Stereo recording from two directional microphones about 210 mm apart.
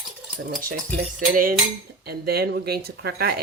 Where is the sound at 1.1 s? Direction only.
40° right (ahead or behind).